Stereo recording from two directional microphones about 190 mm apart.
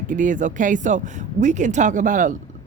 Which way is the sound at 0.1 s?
45° right (ahead or behind).